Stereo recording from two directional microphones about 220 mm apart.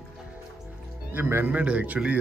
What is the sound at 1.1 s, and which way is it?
A man's voice, 10° right (ahead or behind).